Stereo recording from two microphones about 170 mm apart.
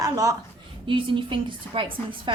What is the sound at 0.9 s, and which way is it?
A woman's voice, 30° right (ahead or behind).